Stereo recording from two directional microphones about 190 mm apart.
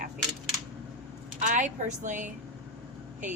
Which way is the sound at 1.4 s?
40° right (ahead or behind).